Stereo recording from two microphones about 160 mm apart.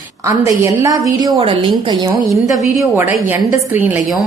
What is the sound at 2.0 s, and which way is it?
A woman's voice, 20° right (ahead or behind).